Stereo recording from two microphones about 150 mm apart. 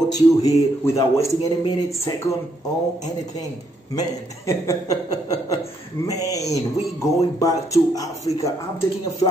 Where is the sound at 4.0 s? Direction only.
20° left (ahead or behind).